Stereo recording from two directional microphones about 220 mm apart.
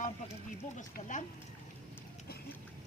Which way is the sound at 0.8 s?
35° left (ahead or behind).